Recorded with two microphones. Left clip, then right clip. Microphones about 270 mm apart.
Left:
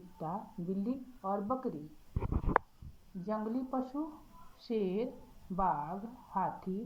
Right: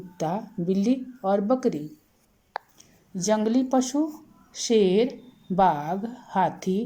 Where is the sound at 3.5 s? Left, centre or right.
Right.